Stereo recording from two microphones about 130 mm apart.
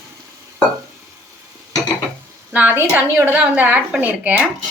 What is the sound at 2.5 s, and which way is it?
A woman's voice, 15° right (ahead or behind).